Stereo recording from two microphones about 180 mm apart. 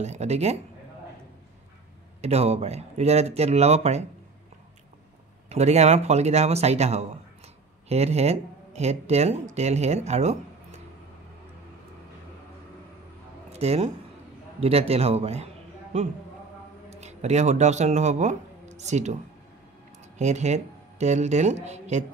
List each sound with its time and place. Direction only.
0.0 s speech: 40° right (ahead or behind)
2.2 s speech: 35° right (ahead or behind)
5.5 s speech: 40° right (ahead or behind)
13.5 s a man's voice: 35° right (ahead or behind)
20.2 s speech: 40° right (ahead or behind)